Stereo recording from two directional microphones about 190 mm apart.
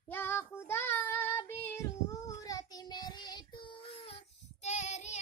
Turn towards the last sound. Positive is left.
turn(degrees=35)  # may be behind; listen again after turning